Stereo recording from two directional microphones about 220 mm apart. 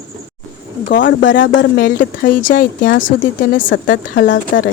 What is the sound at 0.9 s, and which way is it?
Speech, 55° left (ahead or behind).